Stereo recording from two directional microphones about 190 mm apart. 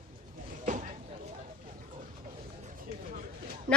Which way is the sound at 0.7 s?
45° right (ahead or behind).